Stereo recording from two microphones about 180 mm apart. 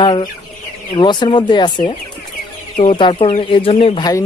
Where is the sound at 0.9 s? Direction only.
25° left (ahead or behind).